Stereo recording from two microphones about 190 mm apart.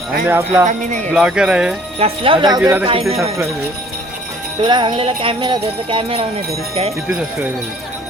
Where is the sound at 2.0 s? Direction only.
30° right (ahead or behind).